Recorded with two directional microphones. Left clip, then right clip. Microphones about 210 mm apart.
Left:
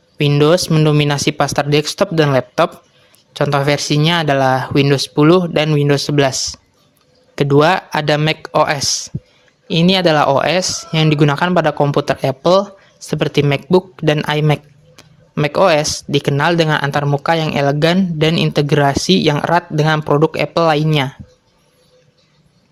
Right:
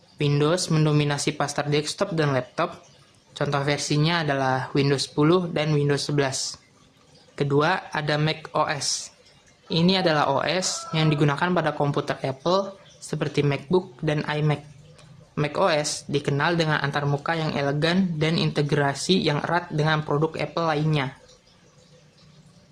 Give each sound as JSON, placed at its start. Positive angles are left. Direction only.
{"t": 0.2, "sound": "speech", "side_deg": 40}